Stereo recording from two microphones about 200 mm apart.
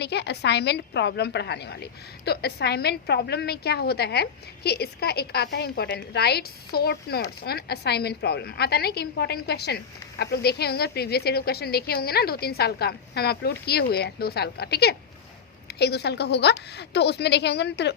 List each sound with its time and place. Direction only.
0.0 s a woman's voice: 55° left (ahead or behind)